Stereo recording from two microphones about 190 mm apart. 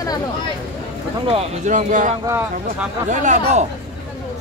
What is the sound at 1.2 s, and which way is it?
Speech, 35° right (ahead or behind).